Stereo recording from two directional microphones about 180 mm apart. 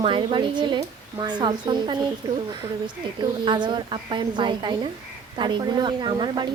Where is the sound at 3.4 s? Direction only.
25° right (ahead or behind).